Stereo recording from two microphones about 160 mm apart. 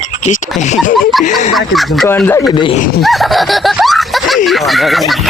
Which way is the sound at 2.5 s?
30° left (ahead or behind).